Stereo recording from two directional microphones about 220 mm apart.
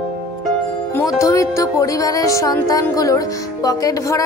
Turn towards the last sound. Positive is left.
turn(degrees=15)  # may be behind; listen again after turning